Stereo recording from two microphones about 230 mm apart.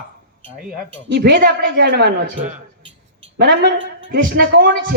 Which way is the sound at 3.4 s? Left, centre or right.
Right.